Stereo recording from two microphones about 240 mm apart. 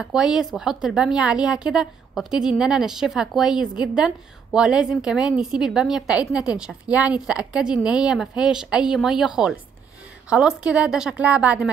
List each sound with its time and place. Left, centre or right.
0.0 s a woman's voice: centre